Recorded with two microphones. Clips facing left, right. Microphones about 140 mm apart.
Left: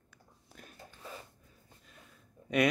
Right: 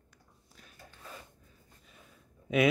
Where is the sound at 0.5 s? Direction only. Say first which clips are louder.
Left 6 dB; 60° left (ahead or behind).